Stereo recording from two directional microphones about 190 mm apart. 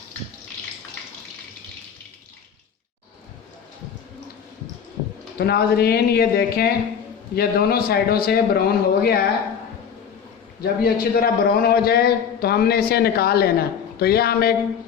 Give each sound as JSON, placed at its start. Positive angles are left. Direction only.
{"t": 5.4, "sound": "a man's voice", "side_deg": 55}
{"t": 10.6, "sound": "a man's voice", "side_deg": 50}